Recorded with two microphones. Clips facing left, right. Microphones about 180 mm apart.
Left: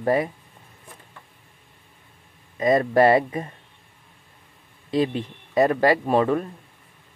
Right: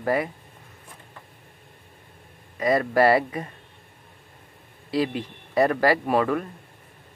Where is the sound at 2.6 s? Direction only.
25° left (ahead or behind).